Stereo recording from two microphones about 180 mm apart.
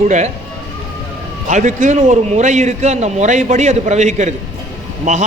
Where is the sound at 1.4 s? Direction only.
45° right (ahead or behind).